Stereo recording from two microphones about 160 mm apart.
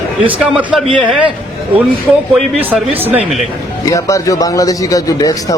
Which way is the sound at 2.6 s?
10° right (ahead or behind).